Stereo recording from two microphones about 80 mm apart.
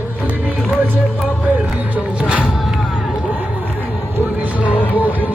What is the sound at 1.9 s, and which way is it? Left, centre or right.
Music, centre.